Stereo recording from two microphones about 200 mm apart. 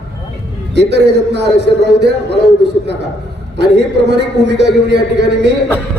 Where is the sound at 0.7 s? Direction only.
60° right (ahead or behind).